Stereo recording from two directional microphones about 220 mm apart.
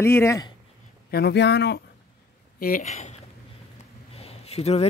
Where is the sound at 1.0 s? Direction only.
45° left (ahead or behind).